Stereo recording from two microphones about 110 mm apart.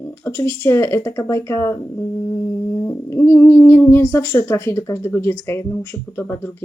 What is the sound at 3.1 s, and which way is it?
Speech, 25° left (ahead or behind).